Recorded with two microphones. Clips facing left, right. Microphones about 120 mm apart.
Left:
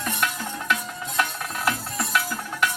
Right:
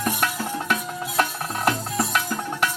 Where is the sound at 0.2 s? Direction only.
35° right (ahead or behind).